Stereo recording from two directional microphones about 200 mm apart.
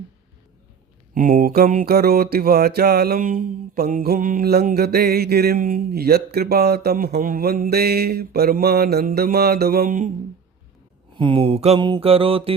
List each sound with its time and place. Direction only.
1.1 s mantra: 45° right (ahead or behind)
11.2 s mantra: 25° right (ahead or behind)